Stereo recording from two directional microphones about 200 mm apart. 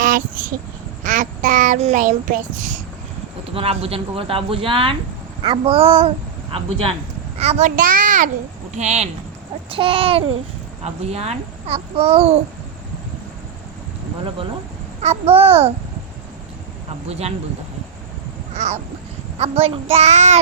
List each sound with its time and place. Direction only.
1.0 s child singing: 40° right (ahead or behind)
3.5 s a child's voice: 30° right (ahead or behind)
15.0 s a child's voice: 30° right (ahead or behind)
17.1 s a child's voice: 30° right (ahead or behind)
18.5 s a child's voice: 35° right (ahead or behind)